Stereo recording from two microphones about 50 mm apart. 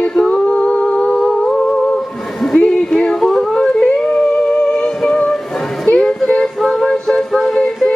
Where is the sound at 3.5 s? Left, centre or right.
Centre.